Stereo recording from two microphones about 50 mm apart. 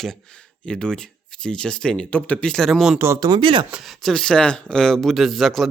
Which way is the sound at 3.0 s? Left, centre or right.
Right.